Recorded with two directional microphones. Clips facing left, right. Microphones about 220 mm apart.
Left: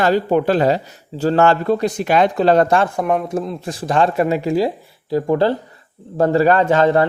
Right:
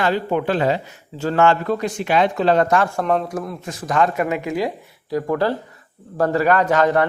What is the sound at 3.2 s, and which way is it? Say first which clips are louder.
A man's voice: left 4 dB; 25° left (ahead or behind).